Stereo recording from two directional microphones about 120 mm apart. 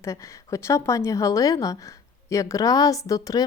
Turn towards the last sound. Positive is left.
turn(degrees=30)  # may be behind; listen again after turning